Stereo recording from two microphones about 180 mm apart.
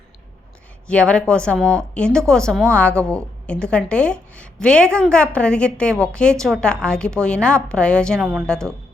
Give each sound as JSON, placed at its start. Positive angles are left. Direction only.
{"t": 0.9, "sound": "a woman's voice", "side_deg": 5}